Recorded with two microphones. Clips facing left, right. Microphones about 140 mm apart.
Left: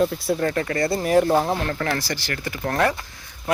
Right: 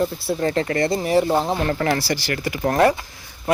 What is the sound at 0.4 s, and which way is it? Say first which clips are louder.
Speech: right 5 dB; 25° right (ahead or behind).